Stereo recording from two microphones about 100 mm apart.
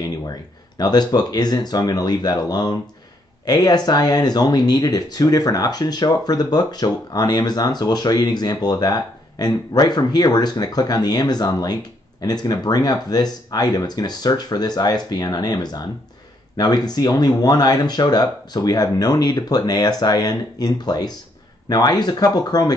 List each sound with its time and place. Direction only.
0.7 s speech: 45° left (ahead or behind)